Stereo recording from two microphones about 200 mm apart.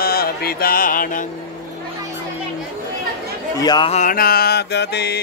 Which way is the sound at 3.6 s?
20° left (ahead or behind).